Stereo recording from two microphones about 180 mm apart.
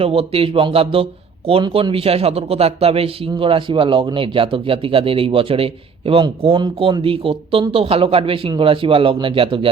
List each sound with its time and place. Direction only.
0.0 s a man's voice: 30° right (ahead or behind)